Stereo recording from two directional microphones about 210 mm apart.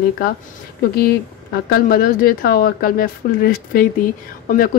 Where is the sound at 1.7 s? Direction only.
45° left (ahead or behind).